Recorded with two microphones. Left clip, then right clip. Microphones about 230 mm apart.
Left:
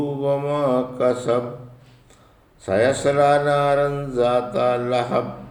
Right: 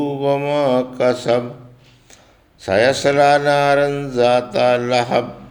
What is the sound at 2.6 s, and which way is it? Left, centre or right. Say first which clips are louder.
Mantra: right 4 dB; right.